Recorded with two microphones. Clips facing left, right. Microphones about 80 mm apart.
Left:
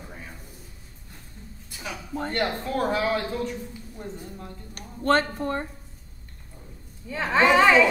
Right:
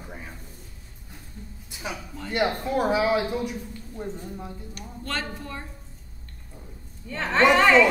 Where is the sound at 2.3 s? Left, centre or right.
Centre.